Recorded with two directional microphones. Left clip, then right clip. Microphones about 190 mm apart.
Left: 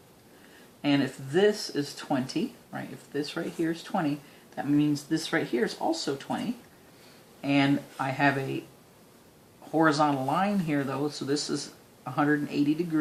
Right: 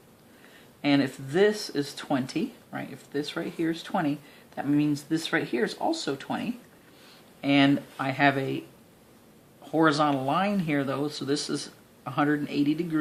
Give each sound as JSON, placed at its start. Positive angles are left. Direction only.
{"t": 0.8, "sound": "speech", "side_deg": -25}
{"t": 7.4, "sound": "speech", "side_deg": -25}
{"t": 9.7, "sound": "speech", "side_deg": -25}